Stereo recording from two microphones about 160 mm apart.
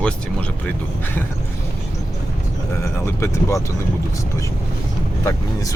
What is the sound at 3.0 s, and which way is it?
Speech, 15° left (ahead or behind).